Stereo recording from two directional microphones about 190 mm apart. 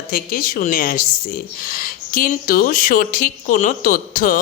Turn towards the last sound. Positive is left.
turn(degrees=45)  # may be behind; listen again after turning